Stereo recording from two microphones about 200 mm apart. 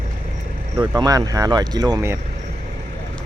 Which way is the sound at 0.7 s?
20° right (ahead or behind).